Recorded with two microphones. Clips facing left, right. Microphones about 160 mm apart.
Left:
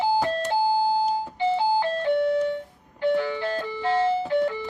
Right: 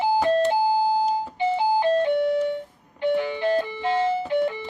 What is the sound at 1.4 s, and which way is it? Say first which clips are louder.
Ice cream truck: right 1 dB; 15° right (ahead or behind).